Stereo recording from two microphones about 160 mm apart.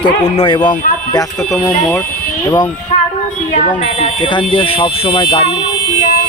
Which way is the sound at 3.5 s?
45° left (ahead or behind).